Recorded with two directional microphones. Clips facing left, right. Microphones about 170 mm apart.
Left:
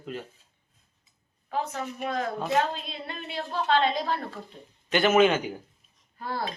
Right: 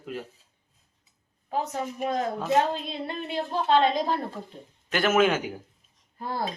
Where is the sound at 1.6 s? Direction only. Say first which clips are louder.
Right 2 dB; 20° right (ahead or behind).